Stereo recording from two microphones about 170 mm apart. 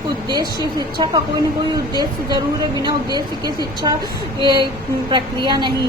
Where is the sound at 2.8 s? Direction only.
25° right (ahead or behind).